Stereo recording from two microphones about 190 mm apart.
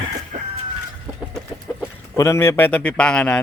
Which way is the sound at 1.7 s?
10° left (ahead or behind).